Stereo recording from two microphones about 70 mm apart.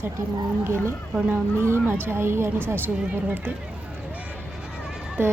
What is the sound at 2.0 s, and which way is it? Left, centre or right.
Speech, right.